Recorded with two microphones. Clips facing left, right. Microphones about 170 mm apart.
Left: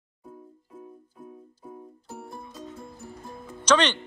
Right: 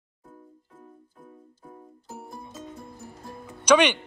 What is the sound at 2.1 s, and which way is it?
Music, 5° right (ahead or behind).